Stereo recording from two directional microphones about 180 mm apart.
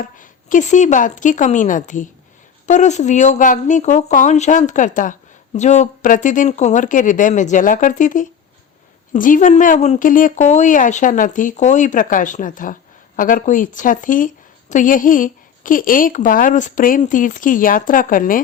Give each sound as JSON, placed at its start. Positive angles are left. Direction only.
{"t": 0.0, "sound": "a woman's voice", "side_deg": 45}